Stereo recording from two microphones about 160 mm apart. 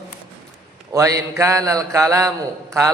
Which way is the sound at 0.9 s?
20° right (ahead or behind).